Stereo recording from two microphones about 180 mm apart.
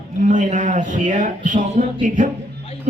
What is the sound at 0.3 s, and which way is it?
A man's voice, 45° right (ahead or behind).